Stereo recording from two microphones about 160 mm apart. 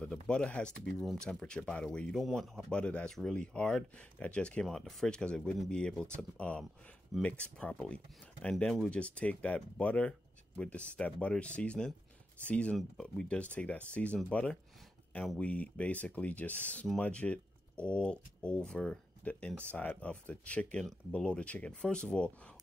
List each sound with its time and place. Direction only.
0.3 s speech: 5° left (ahead or behind)